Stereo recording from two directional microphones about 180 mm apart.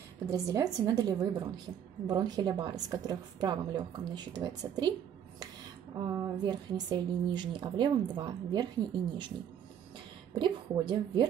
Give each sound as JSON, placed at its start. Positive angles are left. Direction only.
{"t": 0.3, "sound": "speech", "side_deg": -20}
{"t": 5.9, "sound": "speech", "side_deg": -20}
{"t": 10.3, "sound": "speech", "side_deg": -25}